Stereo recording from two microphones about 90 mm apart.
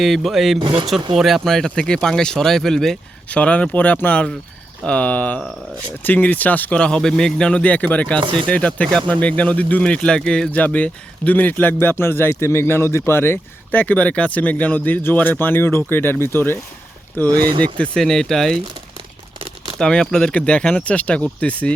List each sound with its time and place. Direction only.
0.0 s speech: centre (ahead or behind)
0.6 s speech: 65° right (ahead or behind)
1.1 s speech: centre (ahead or behind); by 8.2 s 15° left (ahead or behind)
8.2 s speech: 65° right (ahead or behind)
8.4 s speech: 15° left (ahead or behind)
17.2 s speech: 45° right (ahead or behind)
17.7 s speech: 5° left (ahead or behind)
19.8 s speech: 10° left (ahead or behind)